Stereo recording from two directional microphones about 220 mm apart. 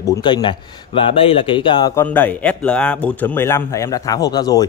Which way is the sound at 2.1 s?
5° left (ahead or behind).